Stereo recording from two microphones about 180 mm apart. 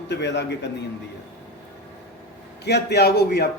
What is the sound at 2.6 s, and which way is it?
Speech, 70° left (ahead or behind).